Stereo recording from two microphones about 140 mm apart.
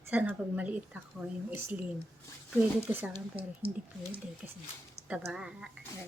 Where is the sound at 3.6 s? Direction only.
40° right (ahead or behind).